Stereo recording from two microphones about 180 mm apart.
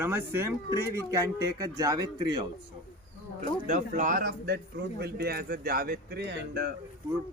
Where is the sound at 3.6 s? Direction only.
40° right (ahead or behind); by 6.7 s 65° right (ahead or behind).